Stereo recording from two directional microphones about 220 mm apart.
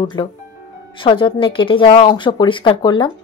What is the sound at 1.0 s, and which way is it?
A woman's voice, 25° left (ahead or behind).